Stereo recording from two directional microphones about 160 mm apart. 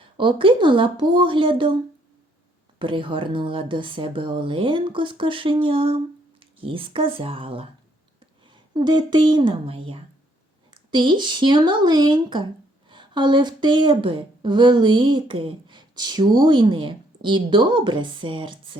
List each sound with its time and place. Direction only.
0.0 s speech: 30° right (ahead or behind)
2.7 s a woman's voice: 30° right (ahead or behind)